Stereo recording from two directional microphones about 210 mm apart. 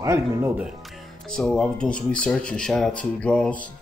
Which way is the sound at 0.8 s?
Centre (ahead or behind).